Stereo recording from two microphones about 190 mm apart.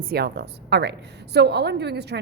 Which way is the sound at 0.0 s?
55° right (ahead or behind).